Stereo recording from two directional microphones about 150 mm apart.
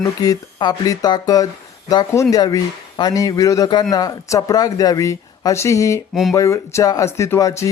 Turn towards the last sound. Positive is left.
turn(degrees=20)  # may be behind; listen again after turning